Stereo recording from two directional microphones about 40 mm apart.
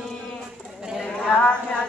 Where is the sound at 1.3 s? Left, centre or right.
Left.